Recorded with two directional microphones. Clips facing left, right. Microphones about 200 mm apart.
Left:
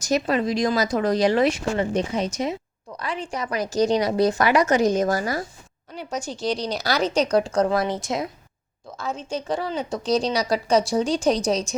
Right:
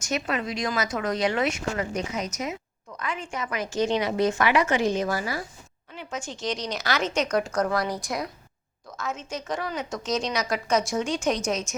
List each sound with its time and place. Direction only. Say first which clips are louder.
0.0 s a woman's voice: left 6 dB; 35° left (ahead or behind)